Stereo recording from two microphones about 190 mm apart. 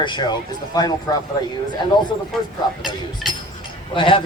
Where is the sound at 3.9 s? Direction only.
25° left (ahead or behind).